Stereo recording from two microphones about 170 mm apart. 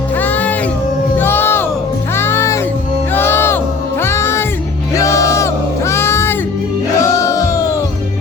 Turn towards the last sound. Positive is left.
turn(degrees=20)  # may be behind; listen again after turning